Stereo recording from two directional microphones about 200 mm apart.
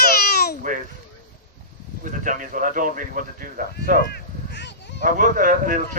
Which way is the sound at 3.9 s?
50° left (ahead or behind).